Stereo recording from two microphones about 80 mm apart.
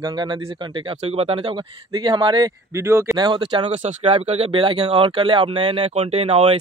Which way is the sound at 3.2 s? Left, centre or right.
Right.